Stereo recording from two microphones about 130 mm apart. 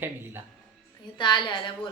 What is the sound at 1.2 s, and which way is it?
Speech, 35° left (ahead or behind).